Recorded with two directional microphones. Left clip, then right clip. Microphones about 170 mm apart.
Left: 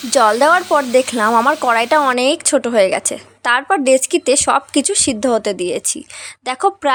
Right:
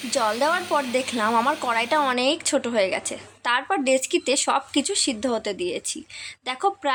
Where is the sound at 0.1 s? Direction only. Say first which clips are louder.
Left 11 dB; 55° left (ahead or behind).